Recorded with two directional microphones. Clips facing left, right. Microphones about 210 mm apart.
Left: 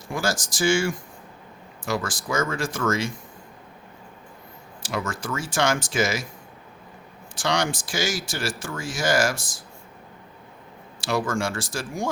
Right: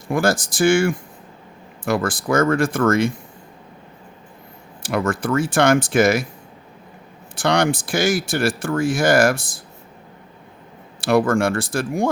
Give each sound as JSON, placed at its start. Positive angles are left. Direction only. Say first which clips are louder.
{"t": 0.1, "sound": "speech", "louder": "right 8 dB", "side_deg": -55}
{"t": 4.8, "sound": "speech", "louder": "right 8 dB", "side_deg": -55}
{"t": 7.3, "sound": "speech", "louder": "right 7 dB", "side_deg": -55}
{"t": 11.0, "sound": "speech", "louder": "right 8 dB", "side_deg": -55}